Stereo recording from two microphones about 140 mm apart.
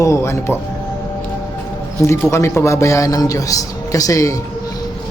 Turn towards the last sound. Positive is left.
turn(degrees=25)  # may be behind; listen again after turning